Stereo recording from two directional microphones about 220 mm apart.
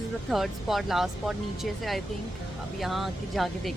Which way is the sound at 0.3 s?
Centre (ahead or behind).